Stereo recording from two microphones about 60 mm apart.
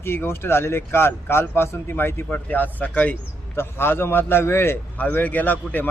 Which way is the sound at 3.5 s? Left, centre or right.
Left.